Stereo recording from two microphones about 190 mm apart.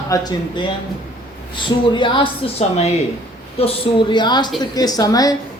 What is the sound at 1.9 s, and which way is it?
A woman's voice, 25° left (ahead or behind).